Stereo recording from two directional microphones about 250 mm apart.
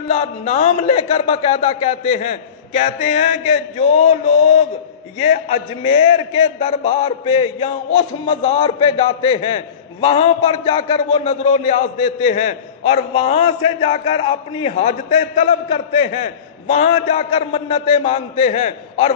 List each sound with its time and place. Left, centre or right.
0.1 s a man's voice: left